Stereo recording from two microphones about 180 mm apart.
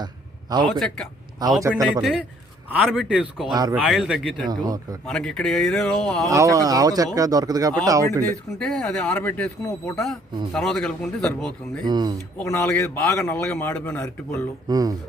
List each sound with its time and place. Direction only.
0.8 s speech: 5° left (ahead or behind)
3.5 s a man's voice: 20° right (ahead or behind)
3.8 s speech: centre (ahead or behind)
4.4 s a man's voice: 20° right (ahead or behind)
5.0 s speech: centre (ahead or behind)
6.2 s a man's voice: 20° right (ahead or behind)
8.5 s speech: 5° left (ahead or behind)
11.9 s a man's voice: 20° right (ahead or behind)
12.4 s a man's voice: 10° left (ahead or behind)
14.7 s a man's voice: 20° right (ahead or behind)